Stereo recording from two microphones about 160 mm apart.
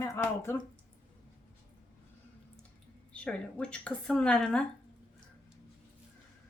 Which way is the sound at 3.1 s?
5° left (ahead or behind).